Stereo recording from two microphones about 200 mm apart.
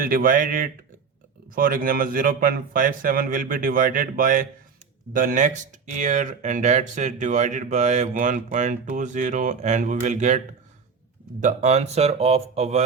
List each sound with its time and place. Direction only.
0.0 s speech: 45° right (ahead or behind)